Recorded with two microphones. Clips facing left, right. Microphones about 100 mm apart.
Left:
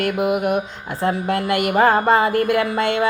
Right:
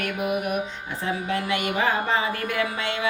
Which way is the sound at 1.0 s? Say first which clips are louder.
Left 7 dB; 40° left (ahead or behind).